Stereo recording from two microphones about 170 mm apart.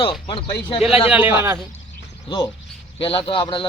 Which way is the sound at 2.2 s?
25° left (ahead or behind).